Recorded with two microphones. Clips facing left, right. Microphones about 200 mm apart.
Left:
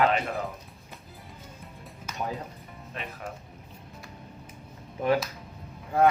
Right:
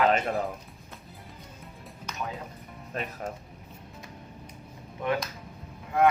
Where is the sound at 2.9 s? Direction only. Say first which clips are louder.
Right 5 dB; 40° right (ahead or behind).